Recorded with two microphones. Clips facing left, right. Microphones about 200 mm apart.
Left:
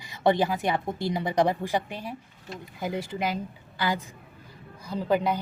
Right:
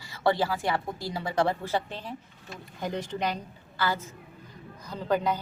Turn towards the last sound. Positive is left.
turn(degrees=10)  # may be behind; listen again after turning